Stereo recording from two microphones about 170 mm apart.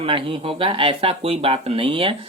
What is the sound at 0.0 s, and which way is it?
Speech, 30° right (ahead or behind).